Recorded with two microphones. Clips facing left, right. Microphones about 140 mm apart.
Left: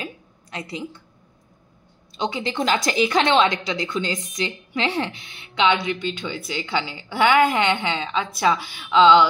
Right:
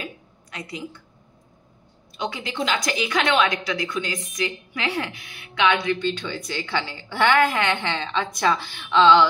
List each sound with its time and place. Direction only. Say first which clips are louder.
0.0 s a sound: left 2 dB; 30° left (ahead or behind)
2.1 s a woman's voice: left 4 dB; 25° left (ahead or behind)
2.5 s a woman's voice: left 3 dB; 35° left (ahead or behind); by 9.3 s 10° left (ahead or behind)